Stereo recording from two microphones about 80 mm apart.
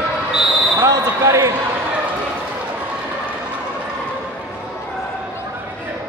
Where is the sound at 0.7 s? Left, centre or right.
Right.